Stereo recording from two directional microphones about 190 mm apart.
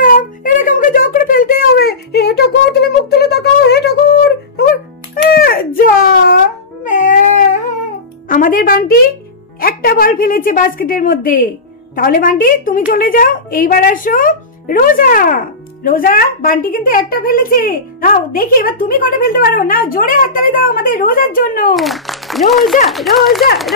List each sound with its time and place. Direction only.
0.0 s a sound: 45° left (ahead or behind)
8.3 s music: 45° left (ahead or behind)
9.6 s a woman's voice: 50° left (ahead or behind)
21.7 s speech: centre (ahead or behind)